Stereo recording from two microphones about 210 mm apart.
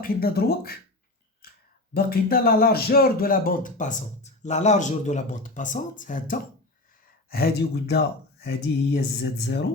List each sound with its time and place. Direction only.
0.0 s speech: 45° left (ahead or behind)
1.4 s a sound: 45° left (ahead or behind)
1.9 s speech: 45° left (ahead or behind)